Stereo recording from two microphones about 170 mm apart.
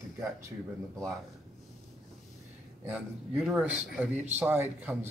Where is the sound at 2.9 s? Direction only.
5° right (ahead or behind).